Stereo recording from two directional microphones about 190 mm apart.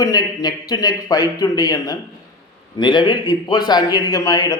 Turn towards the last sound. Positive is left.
turn(degrees=20)  # may be behind; listen again after turning